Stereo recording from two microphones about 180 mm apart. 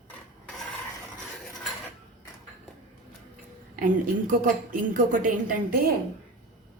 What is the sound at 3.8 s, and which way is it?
A woman's voice, 50° right (ahead or behind).